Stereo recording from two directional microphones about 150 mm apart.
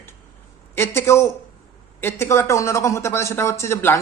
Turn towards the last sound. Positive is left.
turn(degrees=15)  # may be behind; listen again after turning